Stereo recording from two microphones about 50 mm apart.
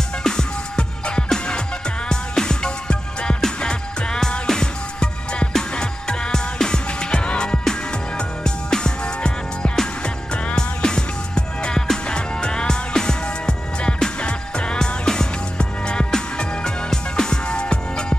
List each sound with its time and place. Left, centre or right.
0.2 s music: centre